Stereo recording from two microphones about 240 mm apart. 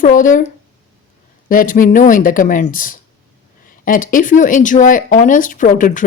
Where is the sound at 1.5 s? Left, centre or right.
Left.